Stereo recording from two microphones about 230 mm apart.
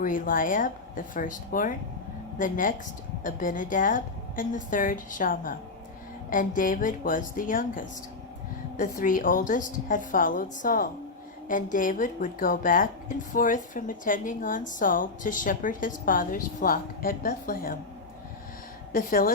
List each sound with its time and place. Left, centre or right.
0.0 s speech: left
18.9 s speech: left